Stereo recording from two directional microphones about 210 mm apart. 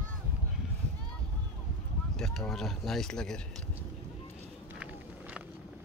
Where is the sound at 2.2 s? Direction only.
Centre (ahead or behind).